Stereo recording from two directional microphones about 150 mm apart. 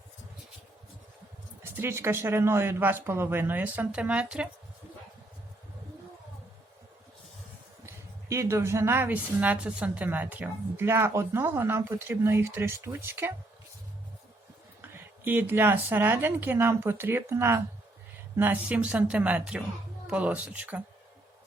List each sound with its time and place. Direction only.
1.7 s a woman's voice: 15° right (ahead or behind)
8.3 s a woman's voice: 20° right (ahead or behind)
14.8 s a woman's voice: 15° right (ahead or behind)